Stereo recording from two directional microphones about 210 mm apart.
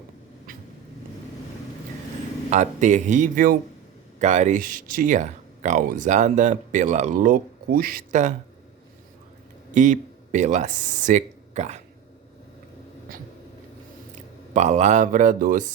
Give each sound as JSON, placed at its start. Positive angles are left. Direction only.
{"t": 2.5, "sound": "speech", "side_deg": -35}
{"t": 9.7, "sound": "speech", "side_deg": -35}
{"t": 14.5, "sound": "speech", "side_deg": -35}